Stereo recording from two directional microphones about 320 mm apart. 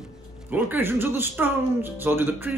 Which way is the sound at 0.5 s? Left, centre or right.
Centre.